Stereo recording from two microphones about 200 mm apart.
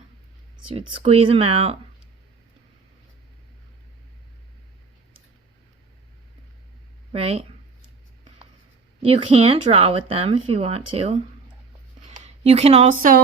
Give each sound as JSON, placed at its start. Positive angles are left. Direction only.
{"t": 0.7, "sound": "speech", "side_deg": -30}
{"t": 7.1, "sound": "speech", "side_deg": -30}
{"t": 9.0, "sound": "speech", "side_deg": -25}